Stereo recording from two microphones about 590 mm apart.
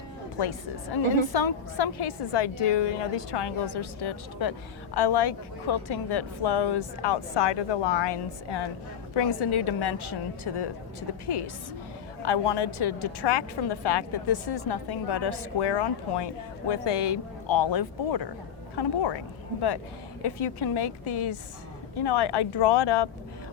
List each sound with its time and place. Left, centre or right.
0.3 s a woman's voice: left
12.2 s a woman's voice: left
20.2 s a woman's voice: left